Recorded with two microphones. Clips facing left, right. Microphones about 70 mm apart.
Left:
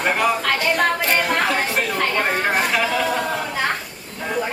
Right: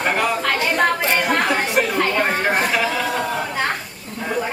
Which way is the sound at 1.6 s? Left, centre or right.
Centre.